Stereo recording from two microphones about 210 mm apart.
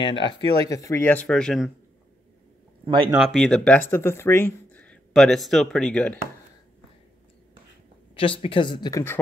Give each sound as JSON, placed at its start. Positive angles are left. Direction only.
{"t": 0.0, "sound": "speech", "side_deg": 20}
{"t": 2.8, "sound": "speech", "side_deg": -25}
{"t": 3.2, "sound": "speech", "side_deg": 5}
{"t": 8.2, "sound": "speech", "side_deg": 25}